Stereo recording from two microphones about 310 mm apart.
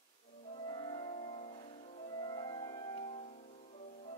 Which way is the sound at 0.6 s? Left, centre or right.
Centre.